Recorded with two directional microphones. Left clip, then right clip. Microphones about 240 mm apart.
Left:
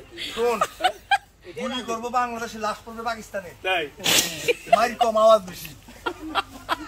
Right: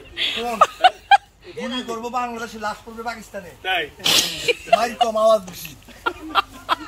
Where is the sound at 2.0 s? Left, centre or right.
Centre.